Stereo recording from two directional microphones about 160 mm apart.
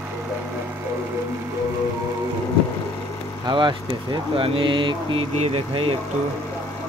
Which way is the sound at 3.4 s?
30° right (ahead or behind).